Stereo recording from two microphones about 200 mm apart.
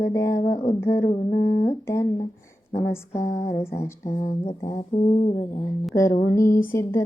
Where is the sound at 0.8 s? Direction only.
15° left (ahead or behind).